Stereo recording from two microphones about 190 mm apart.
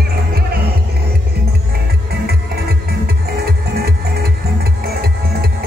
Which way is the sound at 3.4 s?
55° right (ahead or behind).